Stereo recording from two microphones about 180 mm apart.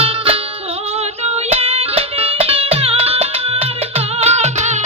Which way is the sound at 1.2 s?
35° right (ahead or behind).